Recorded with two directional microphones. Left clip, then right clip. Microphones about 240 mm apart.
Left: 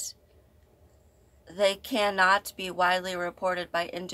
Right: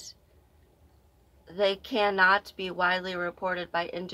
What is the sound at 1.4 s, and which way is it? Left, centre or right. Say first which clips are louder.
Speech: left 1 dB; centre.